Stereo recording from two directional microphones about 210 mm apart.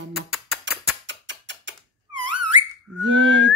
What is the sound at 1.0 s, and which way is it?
Mechanisms, 60° right (ahead or behind).